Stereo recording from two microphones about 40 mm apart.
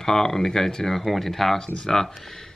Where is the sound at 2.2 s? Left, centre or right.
Centre.